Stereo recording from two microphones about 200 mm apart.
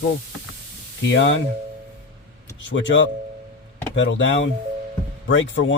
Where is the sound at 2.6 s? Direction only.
65° left (ahead or behind).